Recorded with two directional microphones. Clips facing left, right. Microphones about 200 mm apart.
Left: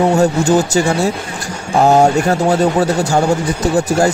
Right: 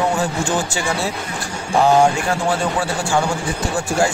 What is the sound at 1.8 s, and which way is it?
Speech, 40° left (ahead or behind).